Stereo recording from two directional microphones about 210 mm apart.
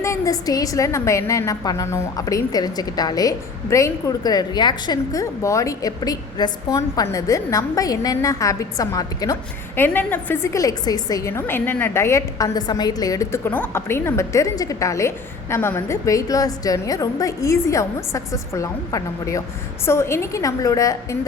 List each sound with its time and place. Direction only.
0.0 s a woman's voice: 15° left (ahead or behind)